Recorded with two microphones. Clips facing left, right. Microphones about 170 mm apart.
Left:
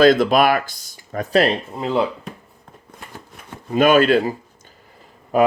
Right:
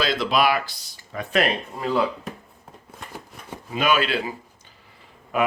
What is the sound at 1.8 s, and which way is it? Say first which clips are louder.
Speech: left 2 dB; 25° left (ahead or behind).